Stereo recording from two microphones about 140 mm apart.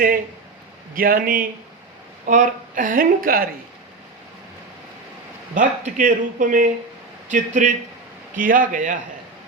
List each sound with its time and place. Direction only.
0.9 s speech: 90° right
2.2 s a woman's voice: 70° right (ahead or behind); by 3.5 s 90° right
5.5 s a woman's voice: 70° right (ahead or behind)